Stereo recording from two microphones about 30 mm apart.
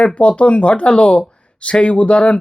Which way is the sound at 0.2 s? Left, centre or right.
Left.